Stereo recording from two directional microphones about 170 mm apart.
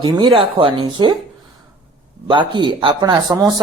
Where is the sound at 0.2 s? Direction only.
30° right (ahead or behind).